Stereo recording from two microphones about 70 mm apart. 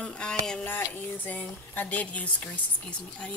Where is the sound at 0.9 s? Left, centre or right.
Left.